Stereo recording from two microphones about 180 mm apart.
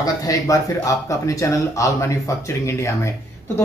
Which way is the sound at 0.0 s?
20° left (ahead or behind).